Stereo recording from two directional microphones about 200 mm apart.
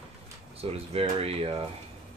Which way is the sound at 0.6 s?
30° right (ahead or behind).